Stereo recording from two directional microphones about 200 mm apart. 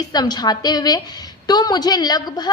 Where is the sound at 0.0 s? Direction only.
20° left (ahead or behind).